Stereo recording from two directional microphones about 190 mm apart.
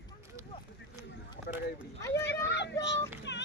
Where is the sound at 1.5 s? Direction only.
50° left (ahead or behind).